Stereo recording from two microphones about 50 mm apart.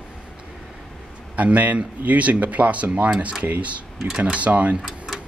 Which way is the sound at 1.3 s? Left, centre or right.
Right.